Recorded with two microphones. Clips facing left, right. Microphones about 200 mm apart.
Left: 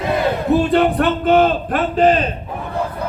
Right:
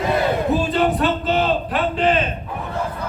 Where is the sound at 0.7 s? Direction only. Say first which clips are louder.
Left 4 dB; 60° left (ahead or behind); by 2.3 s 40° left (ahead or behind).